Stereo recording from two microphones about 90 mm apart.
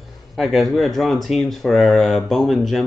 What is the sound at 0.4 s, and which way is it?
Speech, centre (ahead or behind).